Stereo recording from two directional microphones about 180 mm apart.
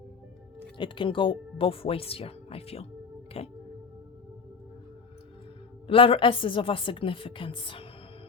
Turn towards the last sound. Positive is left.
turn(degrees=30)  # may be behind; listen again after turning